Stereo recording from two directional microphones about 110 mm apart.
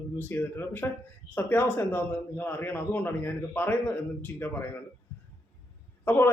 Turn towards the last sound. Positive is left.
turn(degrees=20)  # may be behind; listen again after turning